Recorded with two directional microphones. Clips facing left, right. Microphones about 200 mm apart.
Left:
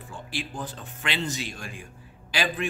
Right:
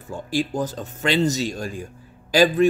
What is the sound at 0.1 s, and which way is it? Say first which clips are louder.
A man's voice: right 11 dB; 40° right (ahead or behind).